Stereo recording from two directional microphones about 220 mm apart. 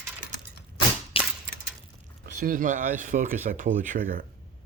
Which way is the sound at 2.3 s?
40° right (ahead or behind).